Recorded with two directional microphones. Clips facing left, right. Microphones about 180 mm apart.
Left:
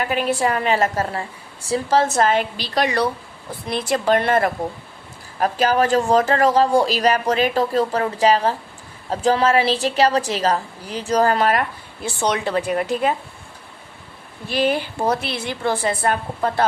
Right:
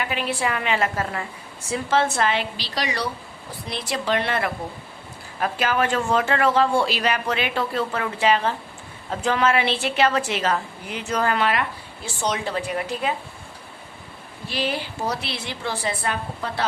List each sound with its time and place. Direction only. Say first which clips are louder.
0.0 s a woman's voice: left 5 dB; 45° left (ahead or behind)
12.5 s speech: left 5 dB; 60° left (ahead or behind)
14.5 s a woman's voice: left 7 dB; 50° left (ahead or behind)